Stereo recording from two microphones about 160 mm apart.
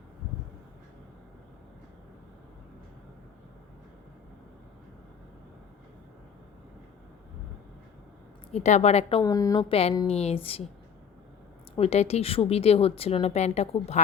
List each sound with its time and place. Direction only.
8.5 s a woman's voice: 45° left (ahead or behind)
9.2 s a woman's voice: 20° left (ahead or behind)
9.6 s a woman's voice: 40° left (ahead or behind)
11.8 s a woman's voice: 40° left (ahead or behind)